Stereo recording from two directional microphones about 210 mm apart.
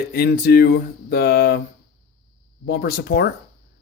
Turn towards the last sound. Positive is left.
turn(degrees=45)  # may be behind; listen again after turning